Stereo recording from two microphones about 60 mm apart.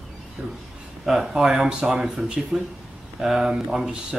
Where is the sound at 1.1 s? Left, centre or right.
Centre.